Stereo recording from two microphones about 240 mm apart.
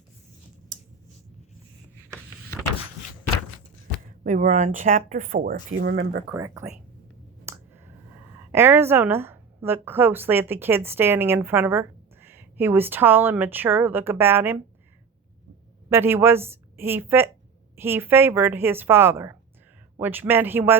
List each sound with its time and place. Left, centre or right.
0.7 s a sound: right
4.2 s speech: right
6.3 s a woman's voice: centre
7.5 s a sound: centre
8.5 s a woman's voice: centre
15.9 s a woman's voice: centre